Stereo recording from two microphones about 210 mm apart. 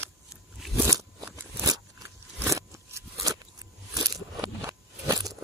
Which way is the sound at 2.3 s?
15° right (ahead or behind).